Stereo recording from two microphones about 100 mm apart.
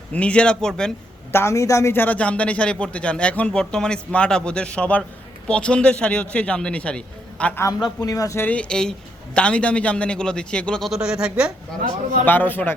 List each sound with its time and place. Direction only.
0.1 s a man's voice: 10° left (ahead or behind)
1.3 s a man's voice: 25° left (ahead or behind); by 7.5 s 10° left (ahead or behind)
7.9 s speech: 35° left (ahead or behind)
8.4 s a man's voice: 15° left (ahead or behind); by 11.5 s 10° right (ahead or behind)
12.2 s a man's voice: 20° left (ahead or behind)